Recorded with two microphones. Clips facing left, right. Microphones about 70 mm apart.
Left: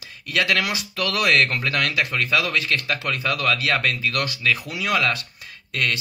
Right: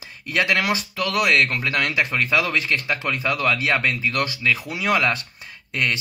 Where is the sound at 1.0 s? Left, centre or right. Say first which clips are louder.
Even; centre.